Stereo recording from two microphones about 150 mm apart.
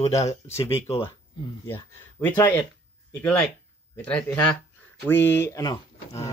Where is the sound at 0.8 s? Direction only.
40° left (ahead or behind).